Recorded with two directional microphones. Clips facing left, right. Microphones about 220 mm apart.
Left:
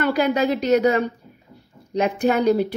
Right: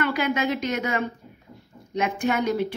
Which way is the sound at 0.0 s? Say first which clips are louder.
Left 5 dB; 35° left (ahead or behind).